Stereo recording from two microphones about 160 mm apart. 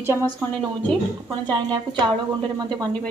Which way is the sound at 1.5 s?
30° right (ahead or behind).